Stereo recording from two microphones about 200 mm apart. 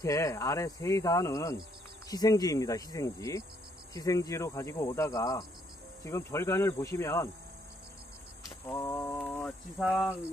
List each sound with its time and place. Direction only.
0.0 s speech: 15° left (ahead or behind)
8.6 s a sound: 15° left (ahead or behind)
9.8 s speech: centre (ahead or behind)